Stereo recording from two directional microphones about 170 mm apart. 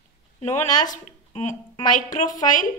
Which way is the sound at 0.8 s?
50° left (ahead or behind).